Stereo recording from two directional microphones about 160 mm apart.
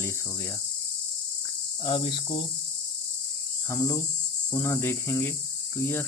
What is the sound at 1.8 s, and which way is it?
Speech, 30° left (ahead or behind).